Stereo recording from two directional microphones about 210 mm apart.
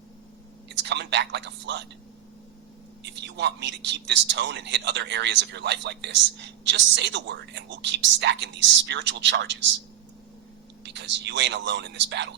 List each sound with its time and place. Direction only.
0.7 s a man's voice: 55° right (ahead or behind)
3.0 s a man's voice: 55° right (ahead or behind)
10.8 s a man's voice: 55° right (ahead or behind)